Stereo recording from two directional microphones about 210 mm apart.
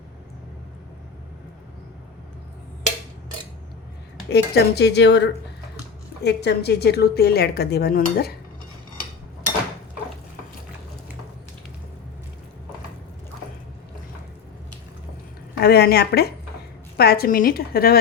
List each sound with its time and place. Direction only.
4.3 s speech: 50° left (ahead or behind)
15.6 s speech: 50° left (ahead or behind)